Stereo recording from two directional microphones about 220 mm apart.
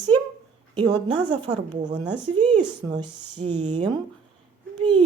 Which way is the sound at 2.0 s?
20° right (ahead or behind).